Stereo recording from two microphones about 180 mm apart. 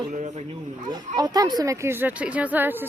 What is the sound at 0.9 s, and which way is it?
Speech, 20° right (ahead or behind).